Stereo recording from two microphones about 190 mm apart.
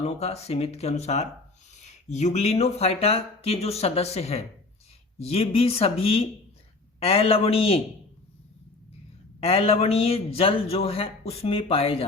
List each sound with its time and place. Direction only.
0.0 s speech: 35° left (ahead or behind)
9.4 s speech: 30° left (ahead or behind)